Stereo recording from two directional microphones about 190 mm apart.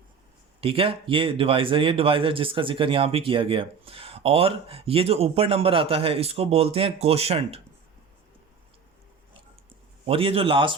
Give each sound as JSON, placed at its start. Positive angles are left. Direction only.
{"t": 0.6, "sound": "speech", "side_deg": -30}
{"t": 10.1, "sound": "speech", "side_deg": -30}